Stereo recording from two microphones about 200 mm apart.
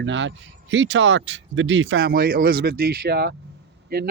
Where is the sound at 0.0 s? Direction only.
65° right (ahead or behind).